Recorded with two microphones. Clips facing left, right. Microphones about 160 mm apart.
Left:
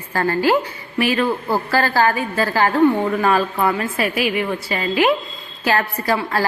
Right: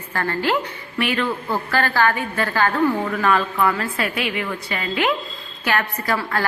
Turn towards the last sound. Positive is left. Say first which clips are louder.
# left 3 dB
turn(degrees=25)  # may be behind; listen again after turning